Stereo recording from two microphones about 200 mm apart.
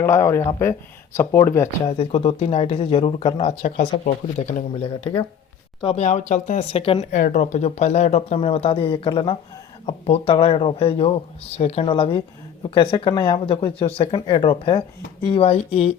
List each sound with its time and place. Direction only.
0.0 s speech: 10° left (ahead or behind)
1.9 s speech: 30° left (ahead or behind)